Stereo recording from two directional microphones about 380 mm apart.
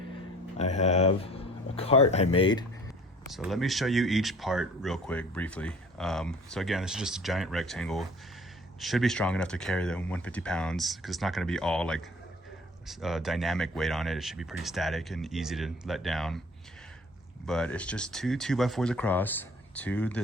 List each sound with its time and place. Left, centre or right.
0.5 s speech: centre
3.3 s speech: centre
17.4 s speech: centre